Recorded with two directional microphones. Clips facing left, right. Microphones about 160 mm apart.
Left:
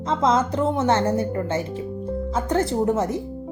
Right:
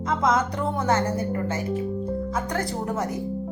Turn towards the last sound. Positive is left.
turn(degrees=25)  # may be behind; listen again after turning